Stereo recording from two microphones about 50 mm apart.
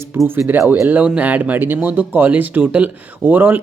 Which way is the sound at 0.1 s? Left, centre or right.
Right.